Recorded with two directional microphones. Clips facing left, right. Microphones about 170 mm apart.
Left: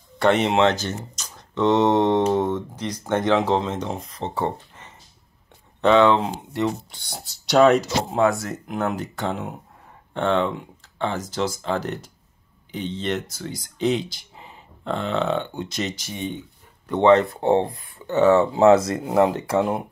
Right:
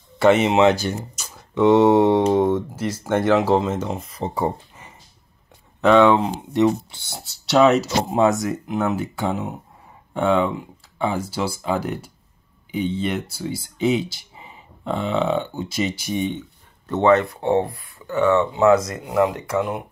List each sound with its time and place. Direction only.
0.2 s speech: 5° right (ahead or behind)
8.2 s speech: 20° right (ahead or behind)
8.6 s speech: 5° right (ahead or behind)
16.8 s speech: 15° left (ahead or behind)
17.1 s speech: 25° left (ahead or behind)
17.6 s speech: 20° left (ahead or behind)
18.1 s speech: 35° left (ahead or behind)